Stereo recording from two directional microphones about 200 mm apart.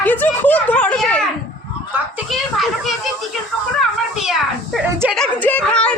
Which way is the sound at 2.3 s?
Centre (ahead or behind).